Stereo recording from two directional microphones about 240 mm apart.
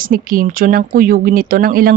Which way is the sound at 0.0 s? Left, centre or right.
Right.